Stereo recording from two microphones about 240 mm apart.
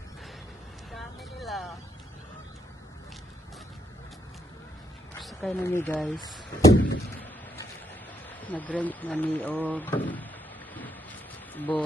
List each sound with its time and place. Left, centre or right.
0.9 s vehicle: centre
5.2 s speech: centre
6.7 s a sound: left
8.4 s speech: centre
11.5 s speech: centre